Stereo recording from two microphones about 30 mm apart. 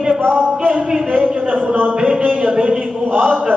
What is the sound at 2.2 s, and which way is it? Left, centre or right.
A man's voice, right.